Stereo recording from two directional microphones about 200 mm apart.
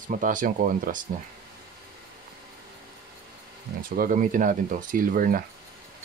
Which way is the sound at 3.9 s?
45° right (ahead or behind).